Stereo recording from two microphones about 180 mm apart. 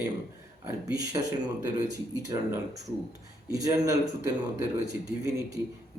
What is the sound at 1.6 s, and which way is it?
A man's voice, 20° right (ahead or behind).